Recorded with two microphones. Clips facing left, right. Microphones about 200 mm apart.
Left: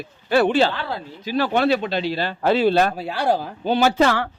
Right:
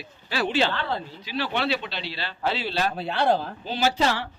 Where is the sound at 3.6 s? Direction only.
55° left (ahead or behind).